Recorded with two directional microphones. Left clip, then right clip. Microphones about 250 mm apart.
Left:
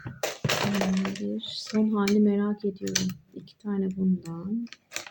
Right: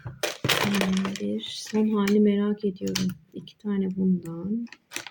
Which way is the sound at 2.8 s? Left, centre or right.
Centre.